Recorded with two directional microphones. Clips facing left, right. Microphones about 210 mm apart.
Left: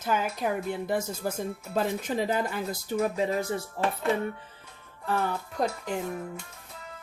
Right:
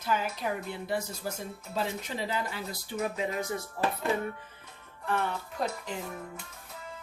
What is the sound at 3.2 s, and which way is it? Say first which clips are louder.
Speech: left 4 dB; 30° left (ahead or behind).